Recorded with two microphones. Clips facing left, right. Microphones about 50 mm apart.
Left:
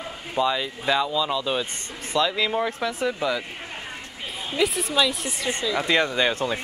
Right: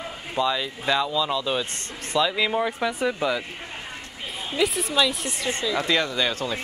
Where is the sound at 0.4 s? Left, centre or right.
Centre.